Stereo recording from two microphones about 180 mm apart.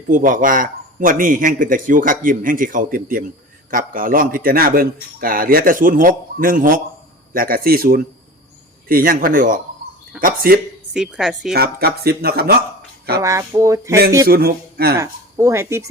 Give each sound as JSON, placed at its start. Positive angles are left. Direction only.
{"t": 0.1, "sound": "a man's voice", "side_deg": -50}
{"t": 10.9, "sound": "a woman's voice", "side_deg": -5}
{"t": 11.5, "sound": "speech", "side_deg": -60}
{"t": 13.2, "sound": "speech", "side_deg": -15}
{"t": 14.3, "sound": "speech", "side_deg": -55}
{"t": 14.9, "sound": "speech", "side_deg": -15}